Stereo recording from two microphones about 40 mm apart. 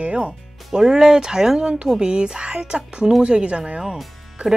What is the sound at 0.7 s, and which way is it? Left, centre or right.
Speech, centre.